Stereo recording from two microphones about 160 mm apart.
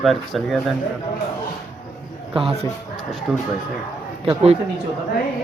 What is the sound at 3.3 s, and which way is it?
Speech, centre (ahead or behind).